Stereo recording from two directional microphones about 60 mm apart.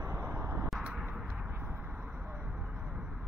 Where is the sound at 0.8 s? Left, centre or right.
Centre.